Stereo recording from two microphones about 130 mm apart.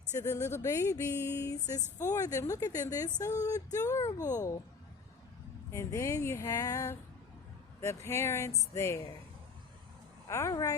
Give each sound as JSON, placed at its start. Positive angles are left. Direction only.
{"t": 0.2, "sound": "music", "side_deg": 20}
{"t": 5.7, "sound": "music", "side_deg": 20}
{"t": 10.2, "sound": "music", "side_deg": 25}